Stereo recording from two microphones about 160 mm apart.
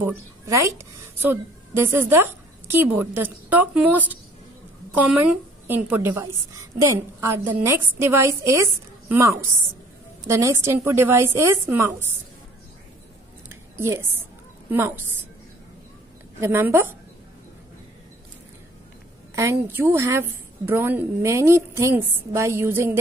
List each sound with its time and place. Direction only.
0.0 s a woman's voice: 15° right (ahead or behind)
13.5 s a sound: 15° right (ahead or behind)
16.3 s a woman's voice: 15° right (ahead or behind)
19.3 s a woman's voice: 15° right (ahead or behind)